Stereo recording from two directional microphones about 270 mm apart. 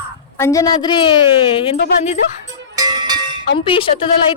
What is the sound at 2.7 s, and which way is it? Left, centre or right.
Music, centre.